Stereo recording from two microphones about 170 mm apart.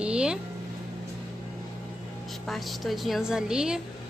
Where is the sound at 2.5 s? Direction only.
Centre (ahead or behind).